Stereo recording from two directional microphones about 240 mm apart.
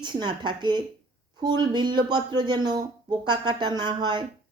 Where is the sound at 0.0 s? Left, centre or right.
Centre.